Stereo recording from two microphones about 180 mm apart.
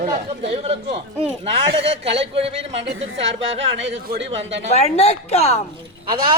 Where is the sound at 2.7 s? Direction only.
85° right.